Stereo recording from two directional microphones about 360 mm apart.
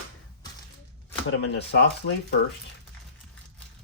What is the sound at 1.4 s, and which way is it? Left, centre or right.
Speech, left.